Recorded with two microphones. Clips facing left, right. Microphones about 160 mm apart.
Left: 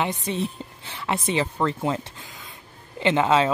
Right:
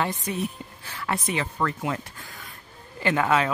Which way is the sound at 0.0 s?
25° left (ahead or behind).